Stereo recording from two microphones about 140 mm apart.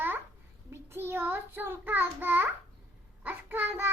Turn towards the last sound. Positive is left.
turn(degrees=-15)  # may be behind; listen again after turning